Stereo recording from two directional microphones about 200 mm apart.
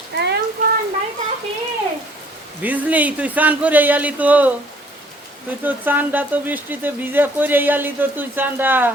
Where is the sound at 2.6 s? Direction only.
10° right (ahead or behind).